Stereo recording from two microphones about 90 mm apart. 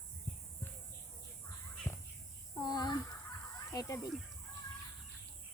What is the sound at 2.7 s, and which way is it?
Speech, 50° left (ahead or behind).